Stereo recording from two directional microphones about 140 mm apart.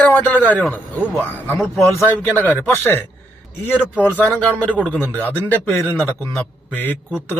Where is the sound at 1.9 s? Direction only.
15° left (ahead or behind).